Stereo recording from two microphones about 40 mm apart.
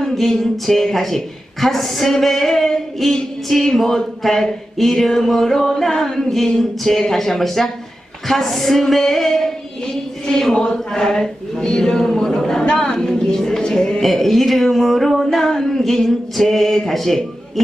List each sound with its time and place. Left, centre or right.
0.0 s a woman's voice: centre
14.0 s a sound: centre
15.2 s a woman's voice: centre